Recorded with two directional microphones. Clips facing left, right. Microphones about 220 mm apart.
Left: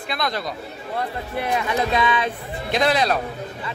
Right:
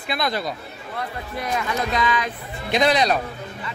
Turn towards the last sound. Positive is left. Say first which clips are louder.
# right 1 dB
turn(degrees=5)  # may be behind; listen again after turning